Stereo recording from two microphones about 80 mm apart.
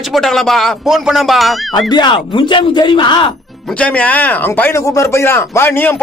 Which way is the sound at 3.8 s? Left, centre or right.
Centre.